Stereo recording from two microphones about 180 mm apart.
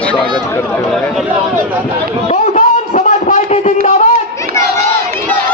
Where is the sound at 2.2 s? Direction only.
45° left (ahead or behind).